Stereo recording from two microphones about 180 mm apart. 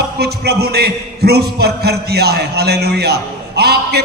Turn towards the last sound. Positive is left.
turn(degrees=-60)  # may be behind; listen again after turning